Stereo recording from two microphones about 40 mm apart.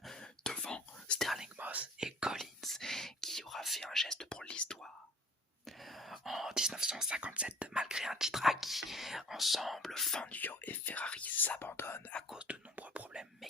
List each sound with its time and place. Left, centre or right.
0.2 s whispering: centre
1.5 s whispering: right
2.0 s whispering: centre
2.4 s whispering: centre
4.3 s whispering: left
5.6 s whispering: centre
7.1 s whispering: right
8.1 s whispering: centre
9.9 s whispering: centre
10.2 s whispering: left
11.6 s whispering: left
12.4 s whispering: right
13.2 s whispering: centre